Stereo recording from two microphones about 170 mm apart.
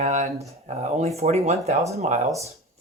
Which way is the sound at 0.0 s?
45° right (ahead or behind).